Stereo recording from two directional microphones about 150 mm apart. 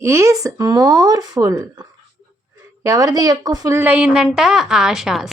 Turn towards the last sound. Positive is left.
turn(degrees=0)  # may be behind; listen again after turning